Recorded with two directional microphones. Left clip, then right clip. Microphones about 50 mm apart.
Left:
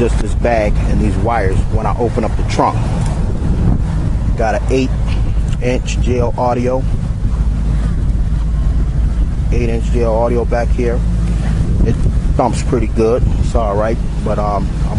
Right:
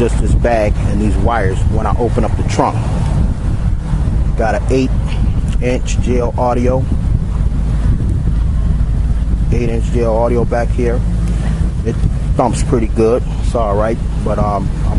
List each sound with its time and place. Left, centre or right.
0.0 s speech: right
2.2 s speech: right
4.4 s speech: right
9.6 s speech: right
12.4 s speech: right